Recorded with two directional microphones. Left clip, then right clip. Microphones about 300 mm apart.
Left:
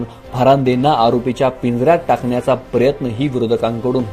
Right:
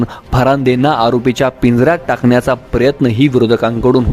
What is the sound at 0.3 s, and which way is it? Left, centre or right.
A man's voice, right.